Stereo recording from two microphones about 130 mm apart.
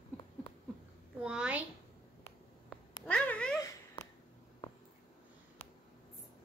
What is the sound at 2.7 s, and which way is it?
Cat, 10° left (ahead or behind).